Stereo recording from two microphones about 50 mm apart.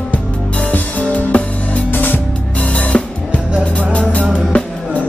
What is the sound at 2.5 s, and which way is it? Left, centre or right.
Music, left.